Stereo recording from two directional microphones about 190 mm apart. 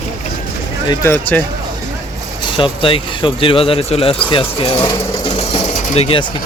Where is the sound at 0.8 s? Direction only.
15° left (ahead or behind).